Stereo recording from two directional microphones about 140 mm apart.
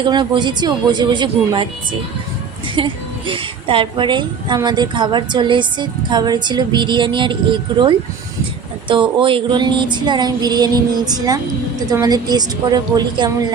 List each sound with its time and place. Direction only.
0.0 s a woman's voice: 35° right (ahead or behind)